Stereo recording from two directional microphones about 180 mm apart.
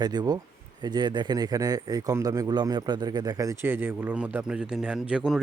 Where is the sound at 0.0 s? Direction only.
25° right (ahead or behind).